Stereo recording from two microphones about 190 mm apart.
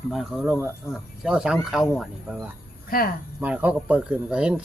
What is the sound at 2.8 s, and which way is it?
Speech, 50° left (ahead or behind).